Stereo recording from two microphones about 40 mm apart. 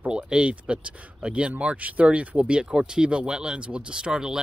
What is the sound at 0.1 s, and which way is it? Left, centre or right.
Speech, right.